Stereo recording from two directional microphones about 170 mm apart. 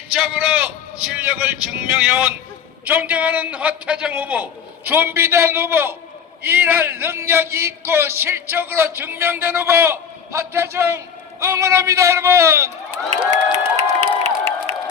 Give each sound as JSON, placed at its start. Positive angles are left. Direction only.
{"t": 0.1, "sound": "a man's voice", "side_deg": -5}
{"t": 14.0, "sound": "crowd", "side_deg": -35}